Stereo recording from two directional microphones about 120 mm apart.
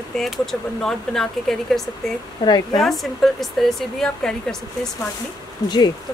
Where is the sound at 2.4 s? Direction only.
40° left (ahead or behind).